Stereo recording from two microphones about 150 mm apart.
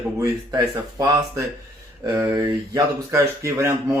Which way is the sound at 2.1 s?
20° right (ahead or behind).